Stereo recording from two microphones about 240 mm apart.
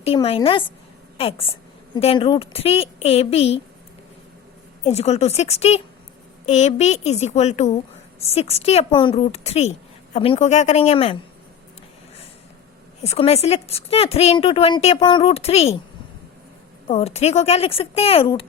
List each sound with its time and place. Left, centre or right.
0.0 s a woman's voice: left
4.8 s a woman's voice: left
13.0 s a woman's voice: left
16.8 s a woman's voice: left